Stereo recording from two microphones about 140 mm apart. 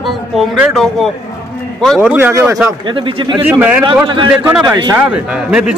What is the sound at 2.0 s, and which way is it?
Speech, 15° right (ahead or behind).